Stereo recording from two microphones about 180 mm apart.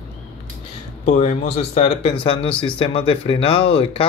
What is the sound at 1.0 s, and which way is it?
Speech, 40° left (ahead or behind).